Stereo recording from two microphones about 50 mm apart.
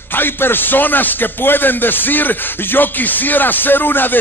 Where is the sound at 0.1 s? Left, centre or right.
Left.